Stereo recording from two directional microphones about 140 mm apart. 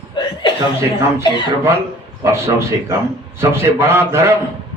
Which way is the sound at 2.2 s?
20° right (ahead or behind).